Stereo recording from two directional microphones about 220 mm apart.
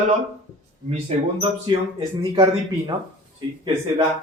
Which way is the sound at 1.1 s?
30° right (ahead or behind).